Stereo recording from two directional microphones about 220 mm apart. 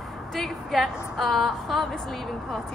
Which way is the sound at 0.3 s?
Centre (ahead or behind).